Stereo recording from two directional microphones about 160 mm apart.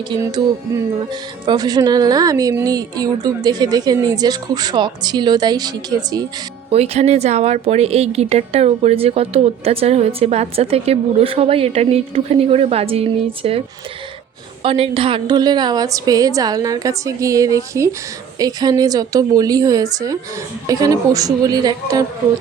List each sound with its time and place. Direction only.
0.2 s a woman's voice: 25° right (ahead or behind)
6.7 s speech: 40° right (ahead or behind)
14.6 s a woman's voice: 35° right (ahead or behind)